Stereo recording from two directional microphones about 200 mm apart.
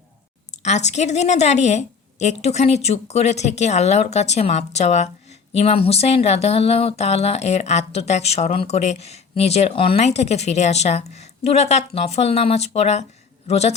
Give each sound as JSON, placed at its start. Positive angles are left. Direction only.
{"t": 0.6, "sound": "a woman's voice", "side_deg": 35}